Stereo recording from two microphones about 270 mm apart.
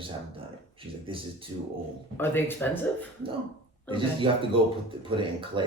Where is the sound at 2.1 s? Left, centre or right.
Centre.